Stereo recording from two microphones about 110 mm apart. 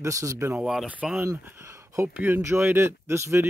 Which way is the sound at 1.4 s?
25° right (ahead or behind).